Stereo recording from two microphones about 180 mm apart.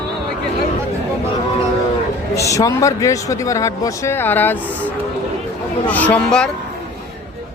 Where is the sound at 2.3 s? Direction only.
15° left (ahead or behind).